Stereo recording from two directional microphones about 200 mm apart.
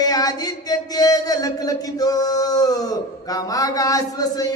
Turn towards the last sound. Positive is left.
turn(degrees=20)  # may be behind; listen again after turning